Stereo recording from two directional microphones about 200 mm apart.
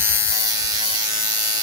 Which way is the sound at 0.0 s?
10° right (ahead or behind).